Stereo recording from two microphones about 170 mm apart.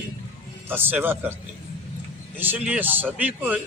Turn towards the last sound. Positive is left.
turn(degrees=-10)  # may be behind; listen again after turning